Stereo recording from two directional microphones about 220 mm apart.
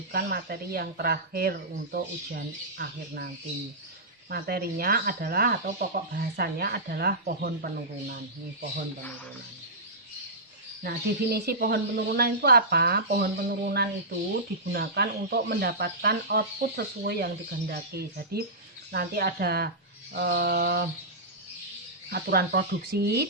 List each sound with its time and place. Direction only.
0.1 s speech: 45° right (ahead or behind)
4.3 s speech: 45° right (ahead or behind)
10.8 s speech: 45° right (ahead or behind)
22.1 s speech: 45° right (ahead or behind)